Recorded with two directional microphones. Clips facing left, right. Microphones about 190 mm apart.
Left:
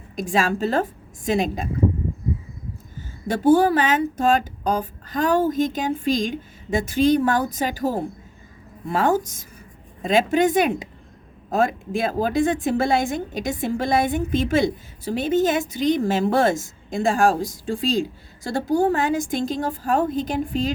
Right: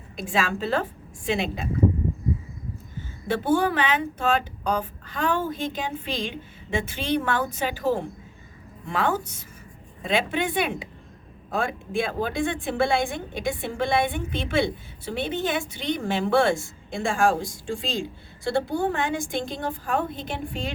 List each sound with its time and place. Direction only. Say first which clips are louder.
0.2 s a woman's voice: left 5 dB; 40° left (ahead or behind)
3.2 s a woman's voice: left 6 dB; 40° left (ahead or behind)